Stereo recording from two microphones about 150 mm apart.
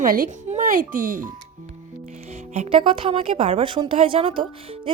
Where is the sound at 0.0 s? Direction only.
70° right (ahead or behind).